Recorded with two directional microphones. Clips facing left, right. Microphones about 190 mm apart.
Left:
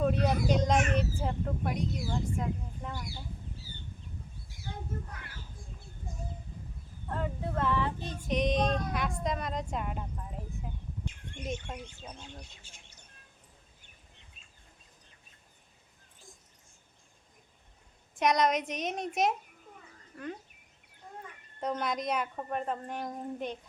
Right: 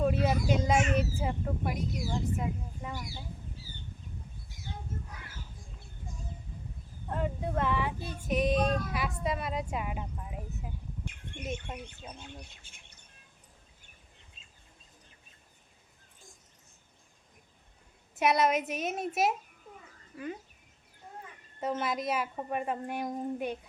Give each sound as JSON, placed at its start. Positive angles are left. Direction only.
{"t": 0.0, "sound": "speech", "side_deg": -5}
{"t": 7.1, "sound": "speech", "side_deg": -15}
{"t": 18.1, "sound": "speech", "side_deg": -5}
{"t": 21.6, "sound": "speech", "side_deg": -5}